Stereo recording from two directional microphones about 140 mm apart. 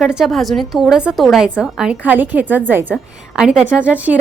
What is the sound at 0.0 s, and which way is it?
A woman's voice, 5° right (ahead or behind).